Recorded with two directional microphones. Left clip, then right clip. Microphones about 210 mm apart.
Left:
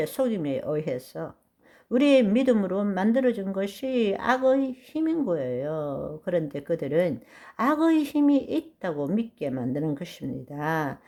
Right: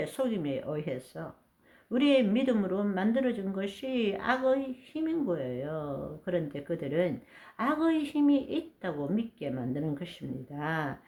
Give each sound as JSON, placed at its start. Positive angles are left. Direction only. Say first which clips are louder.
{"t": 0.0, "sound": "speech", "louder": "left 5 dB", "side_deg": 40}